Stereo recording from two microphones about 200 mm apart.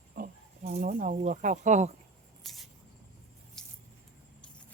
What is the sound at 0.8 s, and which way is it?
Speech, 40° right (ahead or behind).